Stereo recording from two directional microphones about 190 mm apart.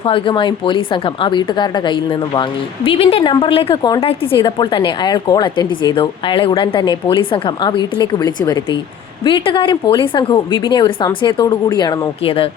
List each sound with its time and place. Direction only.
0.0 s a woman's voice: 25° left (ahead or behind)